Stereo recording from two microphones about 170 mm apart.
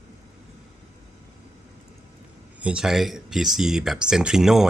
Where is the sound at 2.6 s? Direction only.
5° right (ahead or behind).